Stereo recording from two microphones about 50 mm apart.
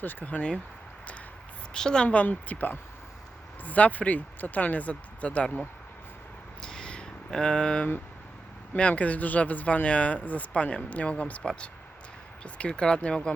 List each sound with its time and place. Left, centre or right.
0.0 s a woman's voice: left
1.7 s a woman's voice: centre
2.0 s a woman's voice: left
6.6 s a sound: centre
8.7 s speech: left